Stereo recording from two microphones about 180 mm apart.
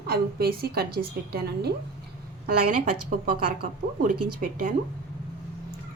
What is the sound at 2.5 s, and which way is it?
A woman's voice, 45° right (ahead or behind).